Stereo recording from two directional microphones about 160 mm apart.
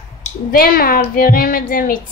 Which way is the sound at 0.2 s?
65° left (ahead or behind).